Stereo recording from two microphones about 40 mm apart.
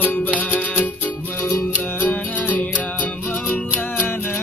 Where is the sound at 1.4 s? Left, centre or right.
Left.